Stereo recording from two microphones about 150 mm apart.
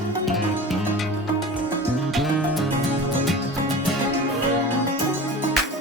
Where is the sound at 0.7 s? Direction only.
Centre (ahead or behind).